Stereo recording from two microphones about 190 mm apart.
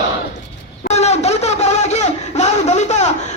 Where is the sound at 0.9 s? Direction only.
35° left (ahead or behind).